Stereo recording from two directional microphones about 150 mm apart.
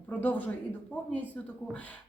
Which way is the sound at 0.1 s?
10° left (ahead or behind).